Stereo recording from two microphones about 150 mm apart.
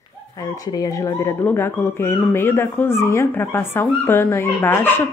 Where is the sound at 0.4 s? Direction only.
25° left (ahead or behind).